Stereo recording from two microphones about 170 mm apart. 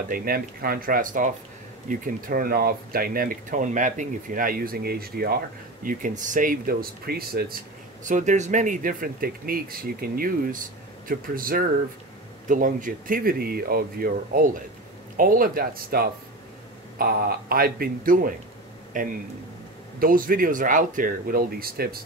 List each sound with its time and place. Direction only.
0.1 s speech: 60° right (ahead or behind)
5.9 s speech: 50° right (ahead or behind)
8.0 s speech: 45° right (ahead or behind); by 22.0 s 65° right (ahead or behind)